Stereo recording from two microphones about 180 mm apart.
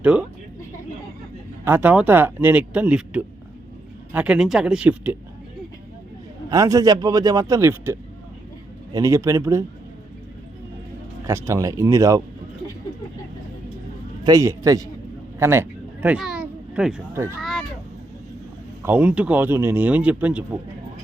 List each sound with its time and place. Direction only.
0.0 s speech: 5° right (ahead or behind)
1.6 s speech: 10° right (ahead or behind)
6.5 s a man's voice: 20° right (ahead or behind)
11.3 s speech: 15° right (ahead or behind)
14.3 s a man's voice: 20° right (ahead or behind)
17.4 s speech: 5° left (ahead or behind)
18.8 s speech: 10° right (ahead or behind)